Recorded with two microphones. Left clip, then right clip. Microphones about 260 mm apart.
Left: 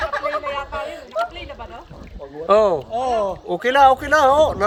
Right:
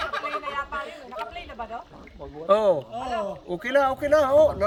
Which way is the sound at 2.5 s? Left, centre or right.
Centre.